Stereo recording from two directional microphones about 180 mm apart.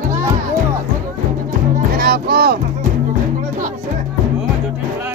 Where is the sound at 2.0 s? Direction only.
60° right (ahead or behind).